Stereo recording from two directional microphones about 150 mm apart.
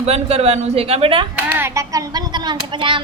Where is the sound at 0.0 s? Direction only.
45° right (ahead or behind).